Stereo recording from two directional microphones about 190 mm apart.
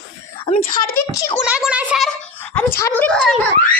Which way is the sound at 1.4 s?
5° right (ahead or behind).